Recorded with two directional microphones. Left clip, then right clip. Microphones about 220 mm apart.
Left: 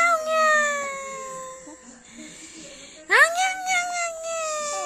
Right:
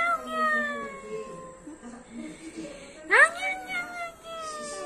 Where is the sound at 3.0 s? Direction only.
35° left (ahead or behind).